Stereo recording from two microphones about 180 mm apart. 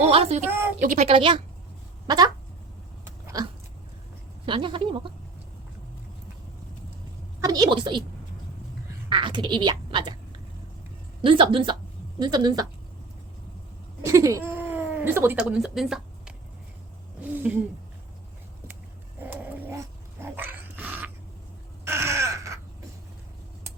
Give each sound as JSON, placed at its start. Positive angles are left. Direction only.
{"t": 0.1, "sound": "a woman's voice", "side_deg": -35}
{"t": 1.0, "sound": "speech", "side_deg": -30}
{"t": 3.0, "sound": "dog", "side_deg": -15}
{"t": 4.4, "sound": "speech", "side_deg": -25}
{"t": 7.4, "sound": "speech", "side_deg": -20}
{"t": 9.0, "sound": "speech", "side_deg": -25}
{"t": 11.2, "sound": "speech", "side_deg": -30}
{"t": 14.0, "sound": "speech", "side_deg": -15}
{"t": 17.3, "sound": "speech", "side_deg": -10}
{"t": 19.2, "sound": "dog", "side_deg": -10}
{"t": 21.8, "sound": "crow", "side_deg": -15}